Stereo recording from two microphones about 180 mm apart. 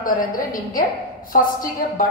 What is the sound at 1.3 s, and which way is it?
Speech, 50° left (ahead or behind).